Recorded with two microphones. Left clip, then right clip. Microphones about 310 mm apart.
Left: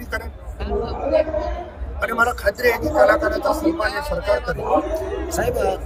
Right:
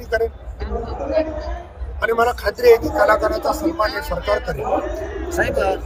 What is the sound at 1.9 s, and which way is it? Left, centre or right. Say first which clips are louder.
A man's voice: right 2 dB; centre.